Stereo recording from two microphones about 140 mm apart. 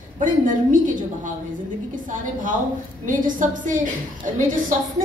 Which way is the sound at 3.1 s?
70° right (ahead or behind).